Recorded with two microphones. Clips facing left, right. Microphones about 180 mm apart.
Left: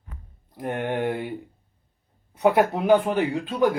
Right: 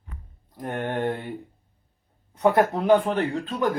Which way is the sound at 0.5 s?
10° left (ahead or behind).